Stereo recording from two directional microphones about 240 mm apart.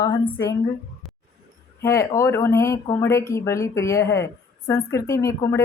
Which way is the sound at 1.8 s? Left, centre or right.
Centre.